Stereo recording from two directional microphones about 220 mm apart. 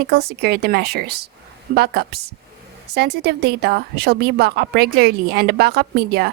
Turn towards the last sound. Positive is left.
turn(degrees=-45)  # may be behind; listen again after turning